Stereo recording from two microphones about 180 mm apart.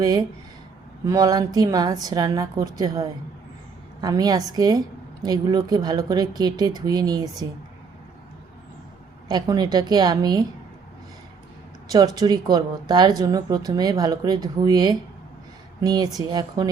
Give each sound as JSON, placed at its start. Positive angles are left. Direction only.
{"t": 0.0, "sound": "speech", "side_deg": -20}
{"t": 9.3, "sound": "speech", "side_deg": -20}
{"t": 11.9, "sound": "speech", "side_deg": -20}